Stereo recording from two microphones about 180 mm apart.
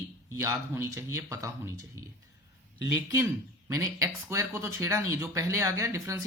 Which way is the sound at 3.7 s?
15° right (ahead or behind).